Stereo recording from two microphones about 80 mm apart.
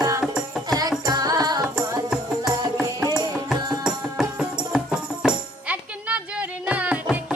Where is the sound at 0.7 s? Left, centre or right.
Right.